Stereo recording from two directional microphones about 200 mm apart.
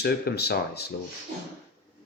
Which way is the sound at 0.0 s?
50° left (ahead or behind).